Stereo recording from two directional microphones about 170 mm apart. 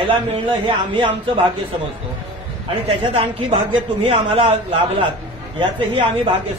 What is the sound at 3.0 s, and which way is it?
A man's voice, 30° right (ahead or behind).